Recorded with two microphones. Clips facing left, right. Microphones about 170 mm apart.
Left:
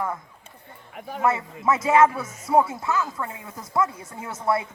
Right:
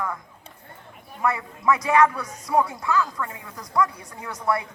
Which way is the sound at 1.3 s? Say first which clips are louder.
Even; 25° left (ahead or behind).